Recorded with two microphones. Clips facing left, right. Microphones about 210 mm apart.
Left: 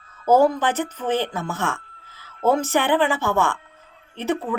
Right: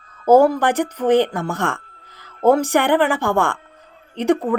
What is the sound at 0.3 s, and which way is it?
Speech, 10° right (ahead or behind).